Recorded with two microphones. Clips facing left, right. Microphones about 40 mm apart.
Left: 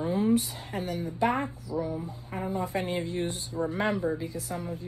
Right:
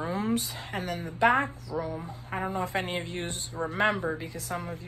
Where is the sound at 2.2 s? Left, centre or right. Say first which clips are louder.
Right 1 dB; right.